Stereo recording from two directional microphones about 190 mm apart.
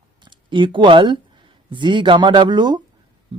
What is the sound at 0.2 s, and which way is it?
Speech, 25° right (ahead or behind).